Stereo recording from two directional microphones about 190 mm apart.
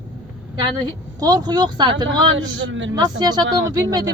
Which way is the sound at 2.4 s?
80° right.